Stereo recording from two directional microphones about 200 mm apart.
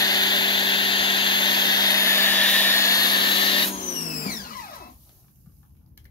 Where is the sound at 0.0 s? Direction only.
20° left (ahead or behind); by 4.7 s 45° left (ahead or behind).